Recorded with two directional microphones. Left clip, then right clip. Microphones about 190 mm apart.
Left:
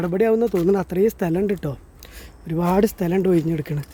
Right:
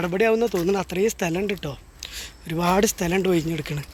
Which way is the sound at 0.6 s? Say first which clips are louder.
Left 3 dB; 35° left (ahead or behind).